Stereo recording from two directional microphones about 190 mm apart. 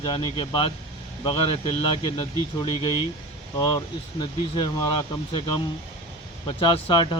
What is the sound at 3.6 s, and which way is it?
Speech, 25° left (ahead or behind).